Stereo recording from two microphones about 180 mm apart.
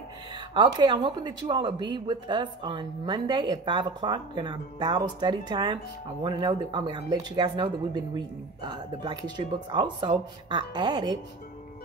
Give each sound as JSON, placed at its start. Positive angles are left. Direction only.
{"t": 0.6, "sound": "speech", "side_deg": -25}